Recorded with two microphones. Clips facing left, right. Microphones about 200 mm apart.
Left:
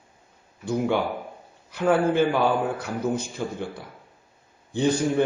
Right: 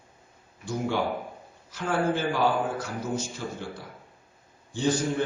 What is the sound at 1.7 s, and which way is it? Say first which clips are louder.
A man's voice: left 6 dB; 60° left (ahead or behind).